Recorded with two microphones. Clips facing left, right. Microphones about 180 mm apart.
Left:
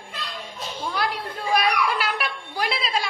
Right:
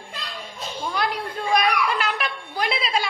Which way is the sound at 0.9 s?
5° left (ahead or behind).